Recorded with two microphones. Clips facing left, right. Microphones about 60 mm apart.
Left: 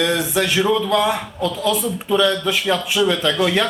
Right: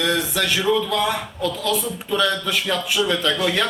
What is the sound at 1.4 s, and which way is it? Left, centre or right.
Speech, left.